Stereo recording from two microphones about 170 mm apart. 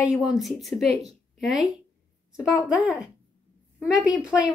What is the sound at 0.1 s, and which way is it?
Speech, centre (ahead or behind).